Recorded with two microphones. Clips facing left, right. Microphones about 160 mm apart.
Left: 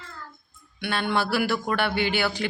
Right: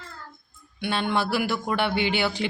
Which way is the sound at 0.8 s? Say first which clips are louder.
Even; 25° right (ahead or behind).